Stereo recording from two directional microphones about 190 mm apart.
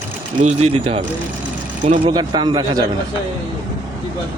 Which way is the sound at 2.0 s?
20° right (ahead or behind).